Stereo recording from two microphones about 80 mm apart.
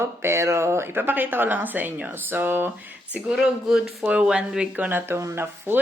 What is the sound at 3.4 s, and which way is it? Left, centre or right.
A woman's voice, centre.